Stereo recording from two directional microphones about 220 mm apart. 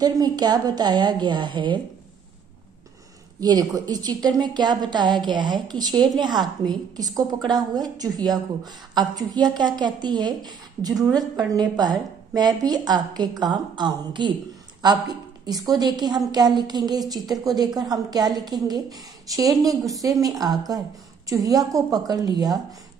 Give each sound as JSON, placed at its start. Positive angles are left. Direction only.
{"t": 0.0, "sound": "a woman's voice", "side_deg": -20}
{"t": 3.3, "sound": "a woman's voice", "side_deg": -15}